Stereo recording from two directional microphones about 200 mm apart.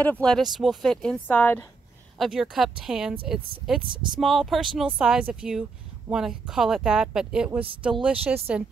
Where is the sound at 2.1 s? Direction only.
Centre (ahead or behind).